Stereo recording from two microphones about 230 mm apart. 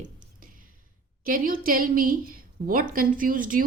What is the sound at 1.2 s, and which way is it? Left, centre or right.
A woman's voice, right.